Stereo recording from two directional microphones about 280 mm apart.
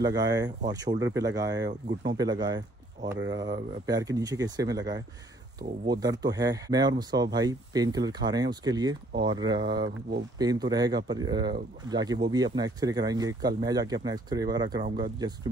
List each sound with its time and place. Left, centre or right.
0.0 s speech: centre